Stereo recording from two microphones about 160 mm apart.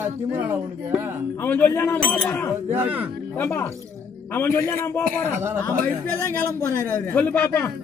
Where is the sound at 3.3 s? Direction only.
10° left (ahead or behind).